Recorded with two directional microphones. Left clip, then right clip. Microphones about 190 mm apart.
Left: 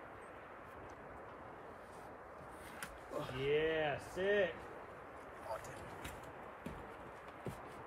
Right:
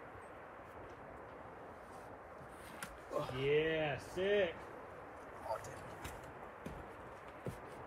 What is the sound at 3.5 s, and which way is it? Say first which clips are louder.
Speech: even; 30° left (ahead or behind).